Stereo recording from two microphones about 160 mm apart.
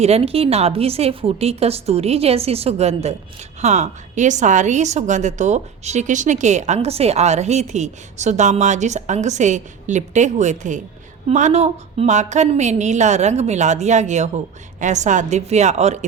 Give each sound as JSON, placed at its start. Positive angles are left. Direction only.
{"t": 0.0, "sound": "a woman's voice", "side_deg": -40}